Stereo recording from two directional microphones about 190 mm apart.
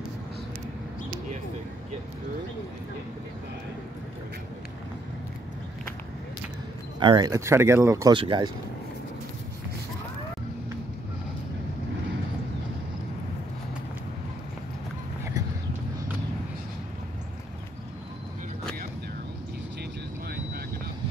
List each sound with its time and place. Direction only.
7.0 s speech: 25° right (ahead or behind)